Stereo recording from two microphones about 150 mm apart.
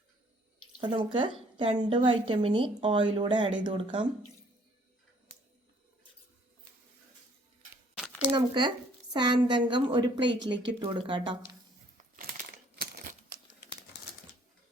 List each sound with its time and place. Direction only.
0.8 s speech: 35° right (ahead or behind)
8.3 s speech: 30° right (ahead or behind)